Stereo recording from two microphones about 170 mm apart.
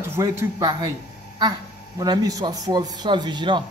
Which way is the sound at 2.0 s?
20° right (ahead or behind).